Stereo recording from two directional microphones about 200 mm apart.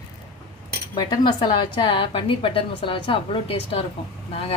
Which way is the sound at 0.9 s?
20° left (ahead or behind).